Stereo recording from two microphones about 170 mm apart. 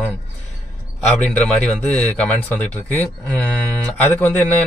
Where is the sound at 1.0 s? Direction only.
5° left (ahead or behind).